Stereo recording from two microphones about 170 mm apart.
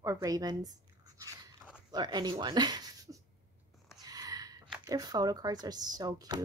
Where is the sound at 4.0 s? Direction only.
20° right (ahead or behind).